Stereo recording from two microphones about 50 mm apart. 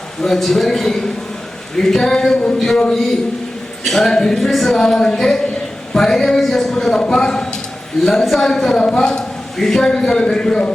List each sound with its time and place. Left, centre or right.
0.2 s speech: centre